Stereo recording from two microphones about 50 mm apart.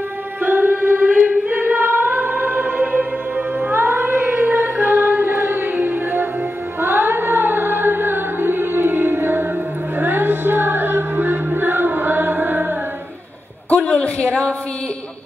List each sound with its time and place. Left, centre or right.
0.4 s choir: right
1.3 s music: right
13.7 s a sound: left